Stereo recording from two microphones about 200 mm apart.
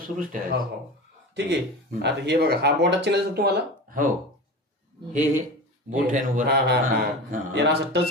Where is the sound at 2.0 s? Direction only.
55° right (ahead or behind).